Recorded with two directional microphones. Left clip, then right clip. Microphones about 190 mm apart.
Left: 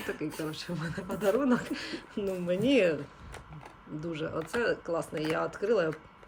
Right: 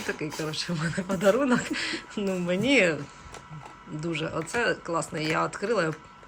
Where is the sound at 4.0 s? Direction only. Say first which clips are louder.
Right 4 dB; 5° left (ahead or behind).